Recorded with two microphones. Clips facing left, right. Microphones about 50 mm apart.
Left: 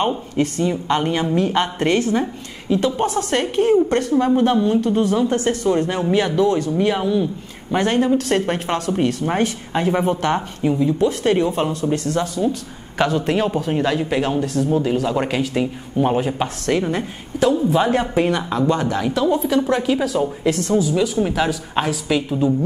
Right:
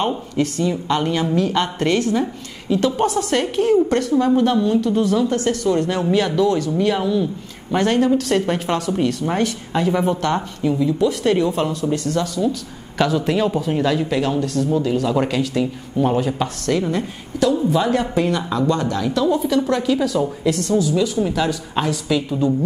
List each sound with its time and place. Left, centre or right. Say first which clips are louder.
0.4 s a woman's voice: even; centre
11.9 s a man's voice: even; left; by 14.1 s centre
14.1 s speech: even; left
15.0 s a woman's voice: right 1 dB; centre
15.3 s a woman's voice: even; left